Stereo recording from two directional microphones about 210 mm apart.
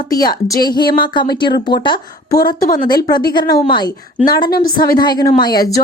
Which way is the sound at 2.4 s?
45° left (ahead or behind).